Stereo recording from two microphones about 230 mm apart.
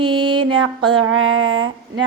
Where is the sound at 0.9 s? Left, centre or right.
Right.